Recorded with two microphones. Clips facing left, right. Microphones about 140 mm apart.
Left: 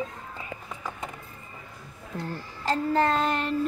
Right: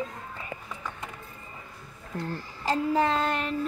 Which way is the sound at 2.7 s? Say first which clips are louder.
Left 1 dB; 5° right (ahead or behind).